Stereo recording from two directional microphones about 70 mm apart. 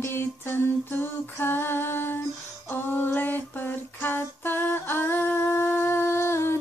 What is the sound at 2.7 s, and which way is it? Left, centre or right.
Female singing, left.